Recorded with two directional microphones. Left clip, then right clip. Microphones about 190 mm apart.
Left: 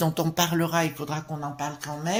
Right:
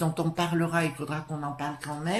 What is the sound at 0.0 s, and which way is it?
Speech, 40° left (ahead or behind).